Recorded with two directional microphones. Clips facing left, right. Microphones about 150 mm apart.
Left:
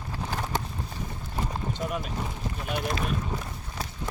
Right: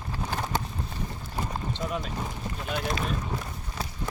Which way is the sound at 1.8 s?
5° left (ahead or behind).